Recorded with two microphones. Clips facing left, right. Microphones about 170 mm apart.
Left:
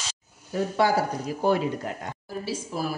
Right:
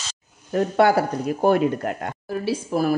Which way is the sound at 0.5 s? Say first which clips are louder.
Right 5 dB; 60° right (ahead or behind).